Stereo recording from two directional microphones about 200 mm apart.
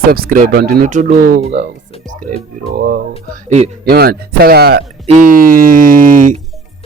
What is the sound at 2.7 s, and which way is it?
Speech, 50° right (ahead or behind).